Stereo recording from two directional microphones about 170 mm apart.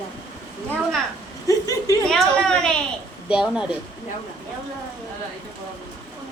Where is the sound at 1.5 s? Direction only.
20° left (ahead or behind).